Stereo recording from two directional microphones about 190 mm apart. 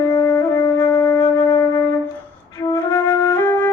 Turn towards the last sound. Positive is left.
turn(degrees=20)  # may be behind; listen again after turning